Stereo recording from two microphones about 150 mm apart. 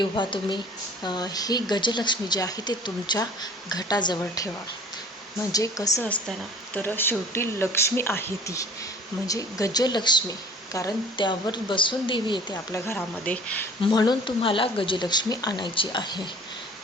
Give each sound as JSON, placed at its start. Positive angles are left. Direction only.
{"t": 0.0, "sound": "speech", "side_deg": 30}
{"t": 5.5, "sound": "speech", "side_deg": 25}
{"t": 6.0, "sound": "speech", "side_deg": 10}
{"t": 12.7, "sound": "speech", "side_deg": 15}
{"t": 13.8, "sound": "speech", "side_deg": 30}